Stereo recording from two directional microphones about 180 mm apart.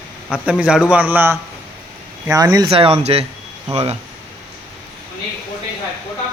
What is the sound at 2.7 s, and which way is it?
Speech, 35° right (ahead or behind).